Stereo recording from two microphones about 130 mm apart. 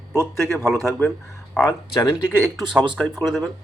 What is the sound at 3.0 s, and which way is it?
Speech, 10° left (ahead or behind).